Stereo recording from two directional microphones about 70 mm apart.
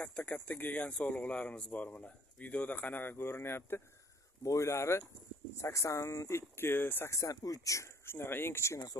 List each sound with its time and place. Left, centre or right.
0.0 s speech: centre; by 3.8 s left
4.4 s speech: left
7.1 s speech: left
8.0 s speech: left